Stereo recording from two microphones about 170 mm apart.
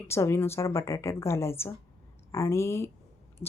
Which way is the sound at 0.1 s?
15° left (ahead or behind).